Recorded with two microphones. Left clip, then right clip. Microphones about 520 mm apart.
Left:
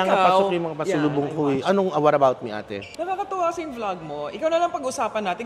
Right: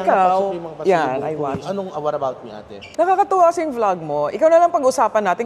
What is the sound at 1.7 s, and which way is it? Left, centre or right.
Speech, left.